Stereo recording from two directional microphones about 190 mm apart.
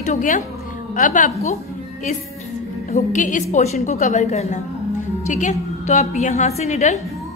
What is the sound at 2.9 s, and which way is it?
A woman's voice, 40° left (ahead or behind).